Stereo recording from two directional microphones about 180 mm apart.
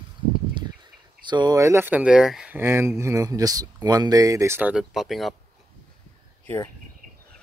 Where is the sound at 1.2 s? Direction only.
25° right (ahead or behind); by 5.3 s centre (ahead or behind).